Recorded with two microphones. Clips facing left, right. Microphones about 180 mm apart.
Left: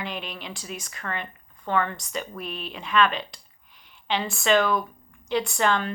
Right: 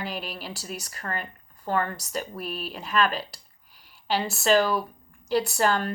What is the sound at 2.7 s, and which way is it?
Speech, 40° right (ahead or behind).